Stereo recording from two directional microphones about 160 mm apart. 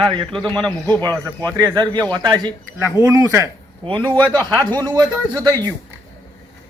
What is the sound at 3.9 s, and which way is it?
Speech, 30° right (ahead or behind).